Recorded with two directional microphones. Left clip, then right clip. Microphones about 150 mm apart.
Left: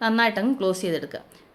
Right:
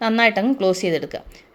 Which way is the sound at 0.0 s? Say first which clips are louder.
Right 4 dB; 25° right (ahead or behind).